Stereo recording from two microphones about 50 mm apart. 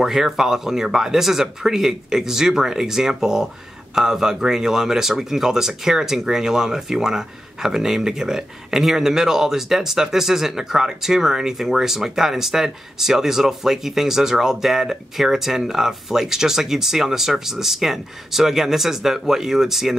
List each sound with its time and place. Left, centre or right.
0.0 s speech: centre